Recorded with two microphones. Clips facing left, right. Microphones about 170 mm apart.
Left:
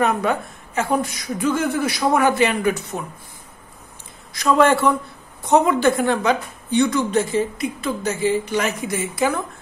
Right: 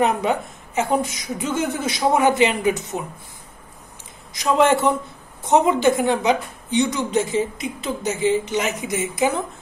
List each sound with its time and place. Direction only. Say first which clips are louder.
0.0 s a woman's voice: even; 20° right (ahead or behind)
4.3 s a woman's voice: left 1 dB; 15° right (ahead or behind)